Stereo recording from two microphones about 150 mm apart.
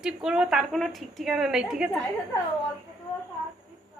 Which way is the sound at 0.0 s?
5° right (ahead or behind).